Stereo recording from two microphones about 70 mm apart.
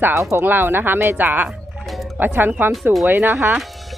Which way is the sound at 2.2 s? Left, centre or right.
Right.